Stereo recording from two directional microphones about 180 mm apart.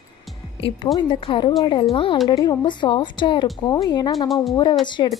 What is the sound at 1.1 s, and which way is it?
Speech, 25° left (ahead or behind).